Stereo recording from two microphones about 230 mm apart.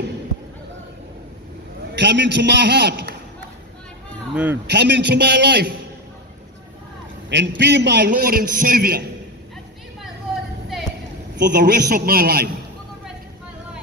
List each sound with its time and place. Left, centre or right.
2.0 s a man's voice: right
4.3 s speech: centre
4.6 s a man's voice: right
7.2 s a man's voice: right
11.3 s a man's voice: right